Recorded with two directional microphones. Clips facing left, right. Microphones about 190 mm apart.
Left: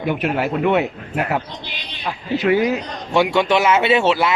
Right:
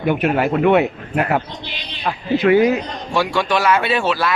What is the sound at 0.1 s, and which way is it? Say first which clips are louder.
Speech: right 4 dB; 50° right (ahead or behind).